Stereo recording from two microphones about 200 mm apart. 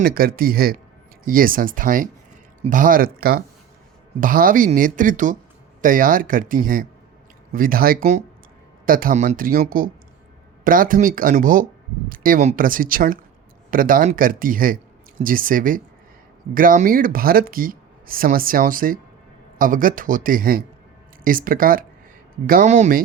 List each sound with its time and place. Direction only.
0.0 s speech: 45° right (ahead or behind)